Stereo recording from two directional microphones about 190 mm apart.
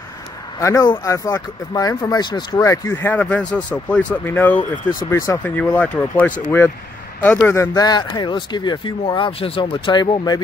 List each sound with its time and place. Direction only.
0.6 s speech: 20° left (ahead or behind)